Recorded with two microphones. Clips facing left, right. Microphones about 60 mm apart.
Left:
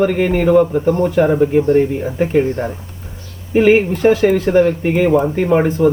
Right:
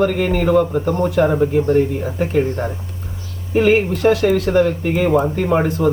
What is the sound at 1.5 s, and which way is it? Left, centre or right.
Speech, left.